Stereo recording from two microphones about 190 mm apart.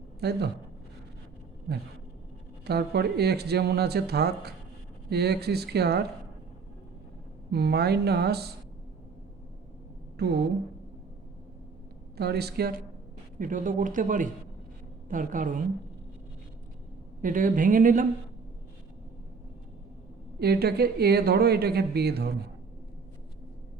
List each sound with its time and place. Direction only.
0.2 s speech: 60° right (ahead or behind)
2.6 s speech: 60° right (ahead or behind)
7.5 s speech: 60° right (ahead or behind)
10.2 s speech: 60° right (ahead or behind)
12.1 s speech: 60° right (ahead or behind)
13.4 s speech: 45° right (ahead or behind)
17.2 s speech: 45° right (ahead or behind)
20.4 s speech: 55° right (ahead or behind)